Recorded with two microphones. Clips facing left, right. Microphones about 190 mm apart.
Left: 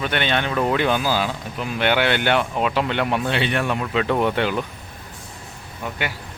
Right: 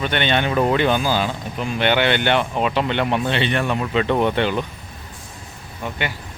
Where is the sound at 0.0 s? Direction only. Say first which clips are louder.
Right 2 dB; 5° left (ahead or behind).